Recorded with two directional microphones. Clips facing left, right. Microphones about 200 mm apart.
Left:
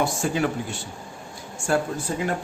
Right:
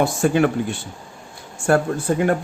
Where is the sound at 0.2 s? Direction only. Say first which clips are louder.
Right 7 dB; 60° right (ahead or behind).